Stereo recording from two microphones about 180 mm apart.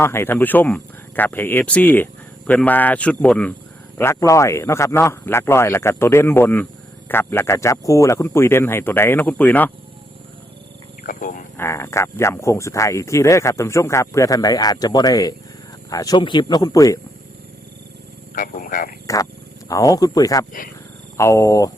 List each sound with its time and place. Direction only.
0.0 s speech: 15° left (ahead or behind)
11.0 s speech: 50° left (ahead or behind)
11.5 s speech: 15° left (ahead or behind)
18.3 s speech: 50° left (ahead or behind)
19.0 s speech: 20° left (ahead or behind)